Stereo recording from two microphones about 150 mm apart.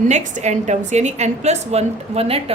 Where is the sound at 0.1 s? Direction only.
50° right (ahead or behind).